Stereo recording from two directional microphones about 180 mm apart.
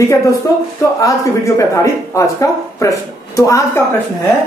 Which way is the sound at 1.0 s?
20° left (ahead or behind).